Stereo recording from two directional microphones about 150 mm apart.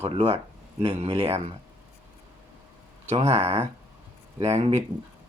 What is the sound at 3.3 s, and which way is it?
Speech, 45° right (ahead or behind).